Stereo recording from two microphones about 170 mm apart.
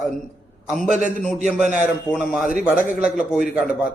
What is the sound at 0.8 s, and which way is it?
Speech, 45° right (ahead or behind).